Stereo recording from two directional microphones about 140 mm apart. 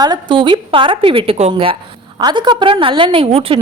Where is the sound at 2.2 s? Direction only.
30° right (ahead or behind).